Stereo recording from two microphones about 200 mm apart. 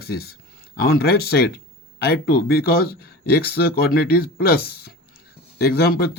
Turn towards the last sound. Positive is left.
turn(degrees=50)  # may be behind; listen again after turning